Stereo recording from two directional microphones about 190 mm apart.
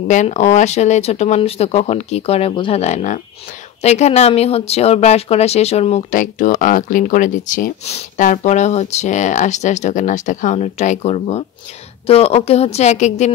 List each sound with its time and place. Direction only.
0.1 s speech: 40° left (ahead or behind)